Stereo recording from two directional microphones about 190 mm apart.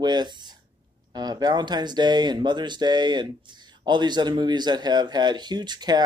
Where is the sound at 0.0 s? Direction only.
20° right (ahead or behind).